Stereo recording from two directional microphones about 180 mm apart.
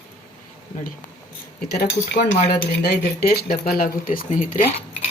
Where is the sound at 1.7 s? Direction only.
60° left (ahead or behind).